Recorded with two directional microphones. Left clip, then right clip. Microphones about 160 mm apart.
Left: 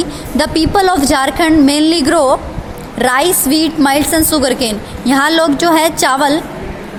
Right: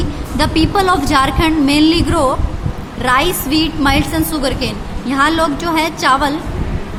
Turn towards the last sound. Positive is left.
turn(degrees=50)  # may be behind; listen again after turning